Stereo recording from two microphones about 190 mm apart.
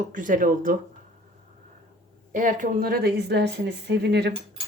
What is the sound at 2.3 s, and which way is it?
A woman's voice, 45° right (ahead or behind).